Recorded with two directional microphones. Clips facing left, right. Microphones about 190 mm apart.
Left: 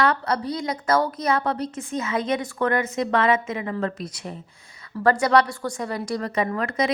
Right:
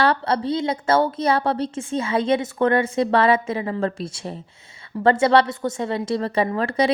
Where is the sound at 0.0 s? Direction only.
30° right (ahead or behind).